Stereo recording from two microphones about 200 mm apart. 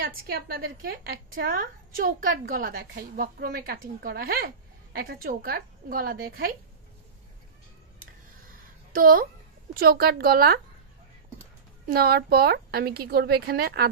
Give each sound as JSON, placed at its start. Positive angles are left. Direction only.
{"t": 0.3, "sound": "a woman's voice", "side_deg": -50}
{"t": 8.9, "sound": "a woman's voice", "side_deg": -45}
{"t": 11.9, "sound": "a woman's voice", "side_deg": -50}